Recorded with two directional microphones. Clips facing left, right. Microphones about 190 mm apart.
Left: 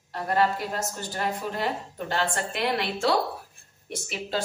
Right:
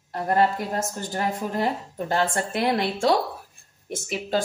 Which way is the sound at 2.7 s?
45° right (ahead or behind).